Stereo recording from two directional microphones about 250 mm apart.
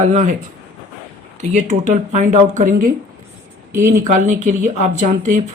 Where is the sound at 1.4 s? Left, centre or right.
Right.